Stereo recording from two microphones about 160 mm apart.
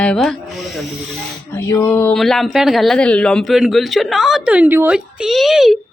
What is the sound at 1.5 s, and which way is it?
Speech, 15° left (ahead or behind).